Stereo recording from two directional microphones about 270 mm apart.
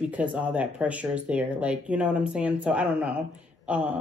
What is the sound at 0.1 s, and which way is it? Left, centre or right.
Speech, centre.